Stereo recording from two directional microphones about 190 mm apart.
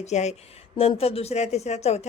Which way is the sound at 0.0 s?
35° left (ahead or behind).